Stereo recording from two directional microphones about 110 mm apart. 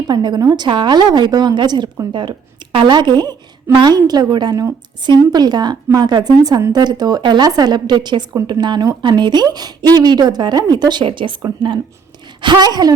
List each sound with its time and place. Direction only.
0.1 s speech: 40° right (ahead or behind)